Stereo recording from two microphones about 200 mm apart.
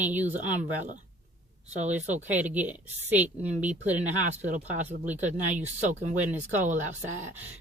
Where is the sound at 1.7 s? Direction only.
35° right (ahead or behind).